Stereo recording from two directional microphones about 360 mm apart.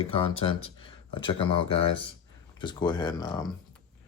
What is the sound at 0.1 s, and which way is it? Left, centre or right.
Speech, centre.